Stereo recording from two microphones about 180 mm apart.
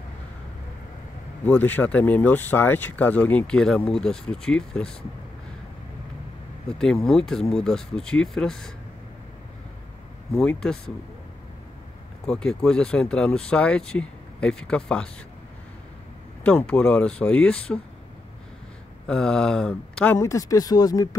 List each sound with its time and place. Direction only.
1.4 s speech: 10° left (ahead or behind)
6.8 s speech: 5° left (ahead or behind)
10.3 s speech: 5° left (ahead or behind)
12.3 s speech: 5° left (ahead or behind)
16.4 s speech: 5° left (ahead or behind)
19.0 s speech: 5° left (ahead or behind); by 21.2 s 20° left (ahead or behind)